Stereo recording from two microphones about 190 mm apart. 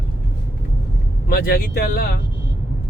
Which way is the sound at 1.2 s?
55° left (ahead or behind).